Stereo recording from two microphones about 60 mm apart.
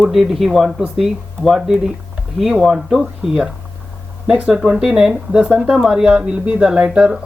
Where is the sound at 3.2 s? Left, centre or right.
Centre.